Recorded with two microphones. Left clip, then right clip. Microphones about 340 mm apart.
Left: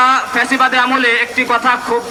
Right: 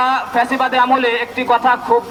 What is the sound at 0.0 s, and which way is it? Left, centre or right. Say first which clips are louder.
A man's voice: left 3 dB; right.